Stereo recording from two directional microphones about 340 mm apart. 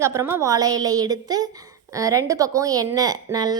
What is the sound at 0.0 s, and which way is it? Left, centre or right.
A woman's voice, centre.